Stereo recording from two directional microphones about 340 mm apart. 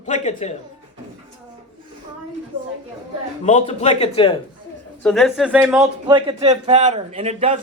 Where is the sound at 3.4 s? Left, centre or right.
Left.